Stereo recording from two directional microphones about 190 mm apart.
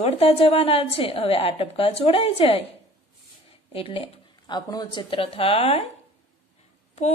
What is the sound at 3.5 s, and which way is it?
Speech, 30° left (ahead or behind).